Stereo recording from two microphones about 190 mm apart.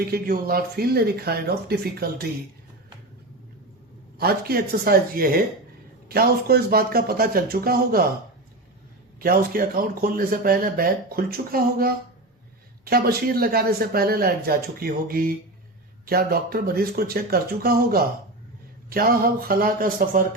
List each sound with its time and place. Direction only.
0.0 s speech: 50° right (ahead or behind)
4.2 s speech: 55° right (ahead or behind)
9.2 s speech: 50° right (ahead or behind)